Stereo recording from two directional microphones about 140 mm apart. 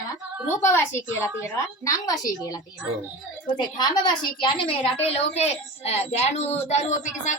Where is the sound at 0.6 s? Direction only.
20° left (ahead or behind).